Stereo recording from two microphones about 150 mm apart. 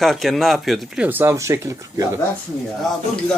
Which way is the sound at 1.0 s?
15° right (ahead or behind).